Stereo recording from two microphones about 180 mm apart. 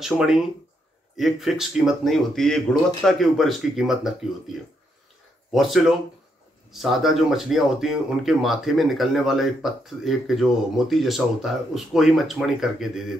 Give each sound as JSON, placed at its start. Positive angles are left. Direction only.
{"t": 0.0, "sound": "speech", "side_deg": 0}
{"t": 5.5, "sound": "speech", "side_deg": 0}